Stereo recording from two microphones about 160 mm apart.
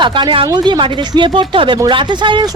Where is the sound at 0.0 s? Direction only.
30° right (ahead or behind).